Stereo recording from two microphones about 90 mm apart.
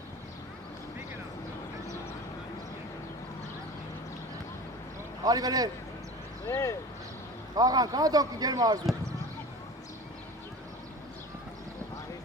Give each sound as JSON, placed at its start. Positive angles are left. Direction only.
{"t": 5.2, "sound": "speech", "side_deg": -45}
{"t": 6.5, "sound": "speech", "side_deg": 35}
{"t": 7.5, "sound": "speech", "side_deg": -45}